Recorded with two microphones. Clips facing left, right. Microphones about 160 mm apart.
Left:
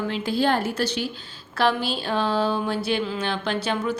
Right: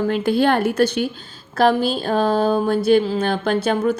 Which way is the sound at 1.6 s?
45° right (ahead or behind).